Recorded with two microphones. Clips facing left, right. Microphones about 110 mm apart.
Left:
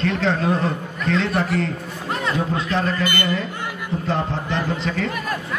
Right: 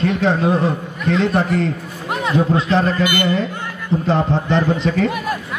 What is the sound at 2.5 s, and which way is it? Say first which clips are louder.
Speech: right 6 dB; 25° right (ahead or behind).